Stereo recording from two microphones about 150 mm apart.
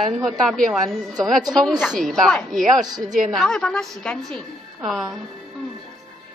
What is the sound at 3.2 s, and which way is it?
A woman's voice, 5° left (ahead or behind).